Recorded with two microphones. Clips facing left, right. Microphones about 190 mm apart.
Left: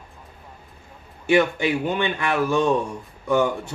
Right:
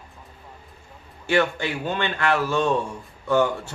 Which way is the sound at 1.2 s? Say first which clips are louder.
Left 3 dB; 15° left (ahead or behind).